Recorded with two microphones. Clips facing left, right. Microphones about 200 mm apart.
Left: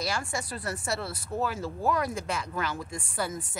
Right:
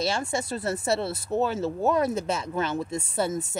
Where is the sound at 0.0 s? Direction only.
25° right (ahead or behind).